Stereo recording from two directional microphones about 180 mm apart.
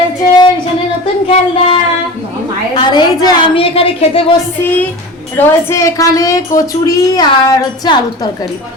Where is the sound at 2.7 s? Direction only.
25° left (ahead or behind).